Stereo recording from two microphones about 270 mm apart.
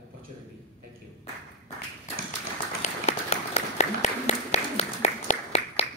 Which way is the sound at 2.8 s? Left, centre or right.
Left.